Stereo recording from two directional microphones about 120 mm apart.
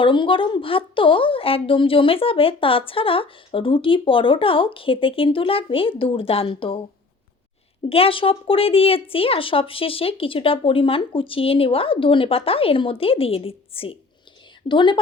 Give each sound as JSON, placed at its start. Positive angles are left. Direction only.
{"t": 0.0, "sound": "speech", "side_deg": 45}
{"t": 7.9, "sound": "speech", "side_deg": 50}